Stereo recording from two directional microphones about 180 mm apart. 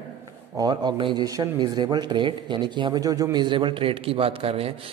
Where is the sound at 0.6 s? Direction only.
20° right (ahead or behind).